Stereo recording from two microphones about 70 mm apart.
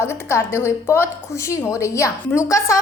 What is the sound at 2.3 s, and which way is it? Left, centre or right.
Speech, left.